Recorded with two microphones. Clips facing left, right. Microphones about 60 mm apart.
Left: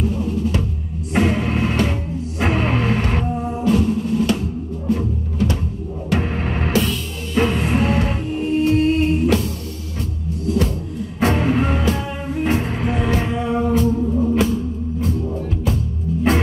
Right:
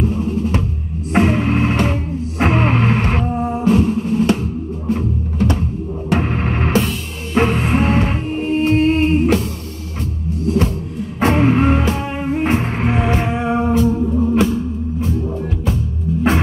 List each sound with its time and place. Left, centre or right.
0.0 s music: right
10.4 s music: right
14.1 s music: centre
14.4 s music: right